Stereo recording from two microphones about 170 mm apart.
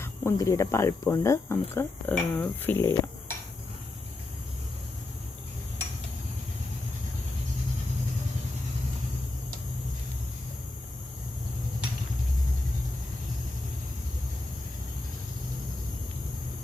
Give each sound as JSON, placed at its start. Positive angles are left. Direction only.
{"t": 0.0, "sound": "speech", "side_deg": 15}